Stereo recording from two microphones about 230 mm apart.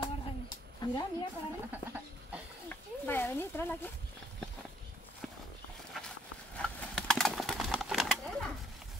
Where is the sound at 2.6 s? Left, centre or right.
Centre.